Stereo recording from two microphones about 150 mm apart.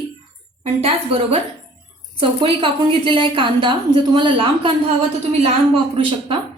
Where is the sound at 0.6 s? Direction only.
40° right (ahead or behind).